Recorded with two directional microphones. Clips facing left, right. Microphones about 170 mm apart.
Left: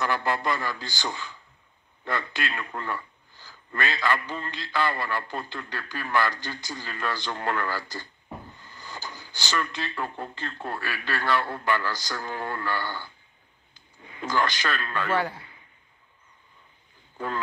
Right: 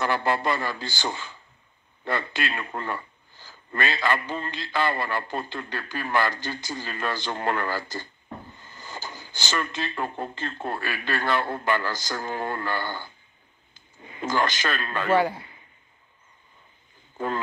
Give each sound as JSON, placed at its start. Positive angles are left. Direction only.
{"t": 0.0, "sound": "a sound", "side_deg": -25}
{"t": 2.0, "sound": "a man's voice", "side_deg": -20}
{"t": 17.2, "sound": "speech", "side_deg": -20}